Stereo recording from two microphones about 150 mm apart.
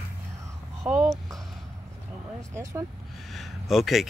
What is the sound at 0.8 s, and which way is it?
Speech, 5° right (ahead or behind).